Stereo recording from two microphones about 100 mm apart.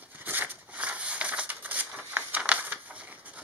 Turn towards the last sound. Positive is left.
turn(degrees=-15)  # may be behind; listen again after turning